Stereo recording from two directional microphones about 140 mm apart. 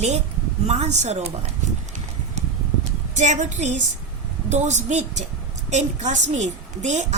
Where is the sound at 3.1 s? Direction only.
60° right (ahead or behind).